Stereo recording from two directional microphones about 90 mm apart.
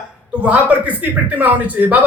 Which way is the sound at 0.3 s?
15° right (ahead or behind).